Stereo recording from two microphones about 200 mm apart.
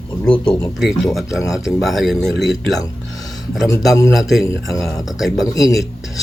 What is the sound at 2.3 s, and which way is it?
Speech, 60° left (ahead or behind).